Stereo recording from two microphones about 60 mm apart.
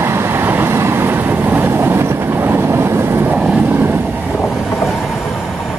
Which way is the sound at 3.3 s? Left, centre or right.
Centre.